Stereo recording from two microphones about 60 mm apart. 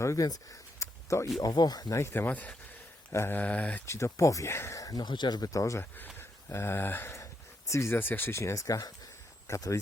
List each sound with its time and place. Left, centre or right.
0.0 s speech: left
0.8 s a sound: left
1.4 s speech: left
2.1 s speech: left
3.1 s mantra: left
3.3 s speech: left
3.8 s speech: left
6.1 s speech: left
7.7 s speech: left
7.9 s speech: left
8.4 s speech: left